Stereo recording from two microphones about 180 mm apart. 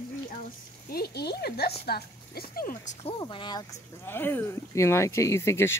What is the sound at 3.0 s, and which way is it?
Speech, 25° left (ahead or behind).